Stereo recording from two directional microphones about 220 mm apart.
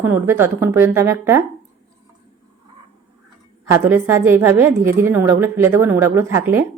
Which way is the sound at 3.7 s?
10° right (ahead or behind).